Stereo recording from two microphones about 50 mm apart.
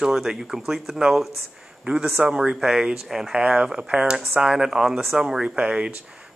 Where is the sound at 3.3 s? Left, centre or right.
Centre.